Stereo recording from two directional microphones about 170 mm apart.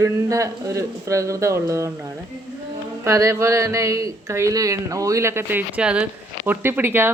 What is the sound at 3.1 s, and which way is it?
Speech, 15° right (ahead or behind).